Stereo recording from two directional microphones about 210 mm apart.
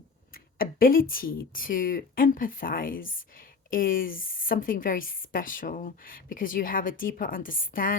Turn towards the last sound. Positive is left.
turn(degrees=40)  # may be behind; listen again after turning